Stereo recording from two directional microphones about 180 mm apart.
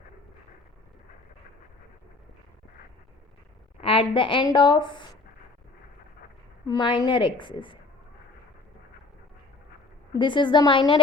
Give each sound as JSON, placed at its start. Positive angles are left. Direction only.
{"t": 3.8, "sound": "a woman's voice", "side_deg": 30}
{"t": 6.7, "sound": "a woman's voice", "side_deg": 25}
{"t": 10.2, "sound": "a woman's voice", "side_deg": 25}